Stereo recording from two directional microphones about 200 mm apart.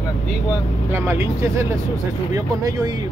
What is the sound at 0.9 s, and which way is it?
Speech, 10° right (ahead or behind).